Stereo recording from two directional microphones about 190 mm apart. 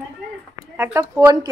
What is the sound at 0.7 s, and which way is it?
Speech, 10° right (ahead or behind).